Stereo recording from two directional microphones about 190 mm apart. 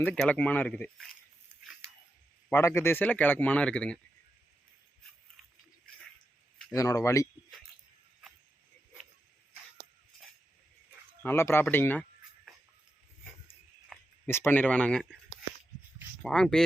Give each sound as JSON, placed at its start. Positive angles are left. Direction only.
{"t": 0.0, "sound": "speech", "side_deg": 5}
{"t": 2.5, "sound": "speech", "side_deg": 15}
{"t": 6.6, "sound": "speech", "side_deg": 15}
{"t": 11.2, "sound": "speech", "side_deg": 10}
{"t": 13.9, "sound": "a sound", "side_deg": 0}
{"t": 14.3, "sound": "speech", "side_deg": 10}
{"t": 16.2, "sound": "speech", "side_deg": 5}